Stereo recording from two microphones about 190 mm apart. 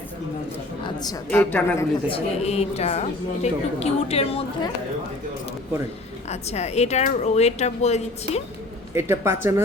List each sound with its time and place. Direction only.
1.3 s speech: 10° left (ahead or behind)
2.0 s a woman's voice: 30° left (ahead or behind)
6.2 s a woman's voice: 35° left (ahead or behind)
9.0 s speech: 10° right (ahead or behind)